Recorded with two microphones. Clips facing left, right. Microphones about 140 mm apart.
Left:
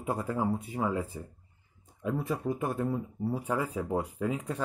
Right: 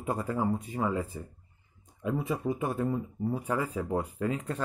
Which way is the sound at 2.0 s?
Centre (ahead or behind).